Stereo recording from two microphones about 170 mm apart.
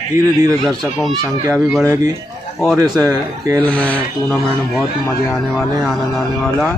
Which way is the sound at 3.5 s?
10° left (ahead or behind).